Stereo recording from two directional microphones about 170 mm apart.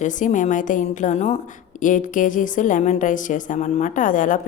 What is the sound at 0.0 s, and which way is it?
A woman's voice, 45° left (ahead or behind).